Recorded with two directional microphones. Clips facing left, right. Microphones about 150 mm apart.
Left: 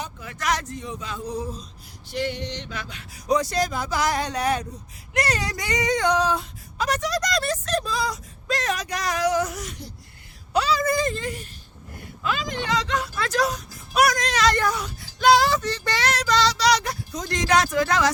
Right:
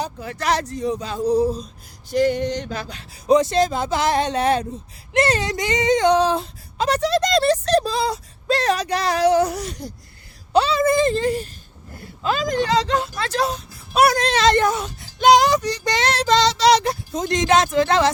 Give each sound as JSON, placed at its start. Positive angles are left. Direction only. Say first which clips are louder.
{"t": 0.0, "sound": "speech", "louder": "right 5 dB", "side_deg": -35}